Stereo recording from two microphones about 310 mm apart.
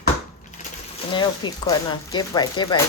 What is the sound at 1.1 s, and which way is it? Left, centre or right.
Speech, centre.